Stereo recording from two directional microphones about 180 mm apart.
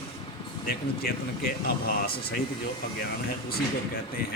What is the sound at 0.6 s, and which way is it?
Speech, 60° left (ahead or behind).